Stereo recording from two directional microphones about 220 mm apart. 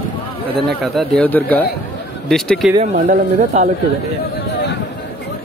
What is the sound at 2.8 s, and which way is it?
Speech, 35° right (ahead or behind).